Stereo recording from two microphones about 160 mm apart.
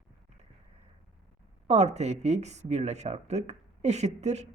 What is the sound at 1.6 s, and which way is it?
A woman's voice, 45° right (ahead or behind).